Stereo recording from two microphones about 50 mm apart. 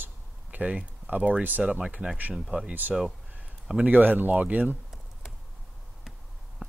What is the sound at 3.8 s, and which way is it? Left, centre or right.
Speech, right.